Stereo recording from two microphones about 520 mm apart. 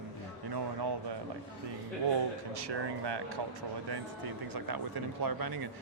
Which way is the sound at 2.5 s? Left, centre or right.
Right.